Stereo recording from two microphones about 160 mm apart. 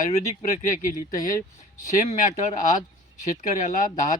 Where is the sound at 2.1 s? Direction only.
50° left (ahead or behind).